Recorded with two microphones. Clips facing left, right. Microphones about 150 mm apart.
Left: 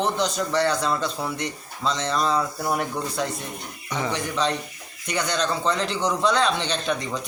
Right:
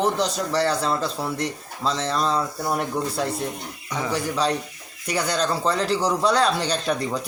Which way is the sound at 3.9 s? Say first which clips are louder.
Right 1 dB; 5° right (ahead or behind).